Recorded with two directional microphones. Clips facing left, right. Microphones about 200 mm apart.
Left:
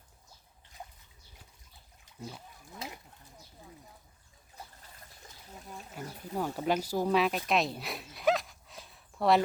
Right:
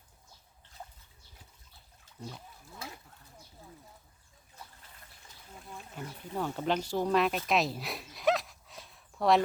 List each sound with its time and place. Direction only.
2.1 s a sound: 15° left (ahead or behind)
2.6 s speech: 20° left (ahead or behind)
6.0 s speech: 10° left (ahead or behind)